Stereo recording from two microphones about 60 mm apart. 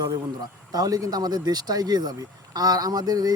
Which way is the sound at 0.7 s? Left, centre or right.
Right.